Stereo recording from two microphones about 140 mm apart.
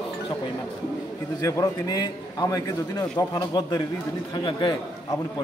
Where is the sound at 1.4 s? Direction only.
25° left (ahead or behind).